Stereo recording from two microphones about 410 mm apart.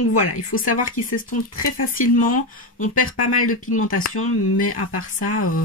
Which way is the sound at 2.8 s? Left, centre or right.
Centre.